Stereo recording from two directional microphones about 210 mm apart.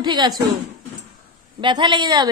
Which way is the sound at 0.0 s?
20° right (ahead or behind).